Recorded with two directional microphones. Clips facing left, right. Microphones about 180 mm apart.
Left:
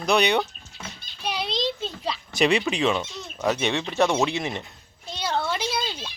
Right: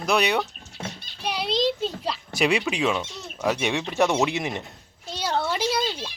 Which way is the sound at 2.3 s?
10° right (ahead or behind).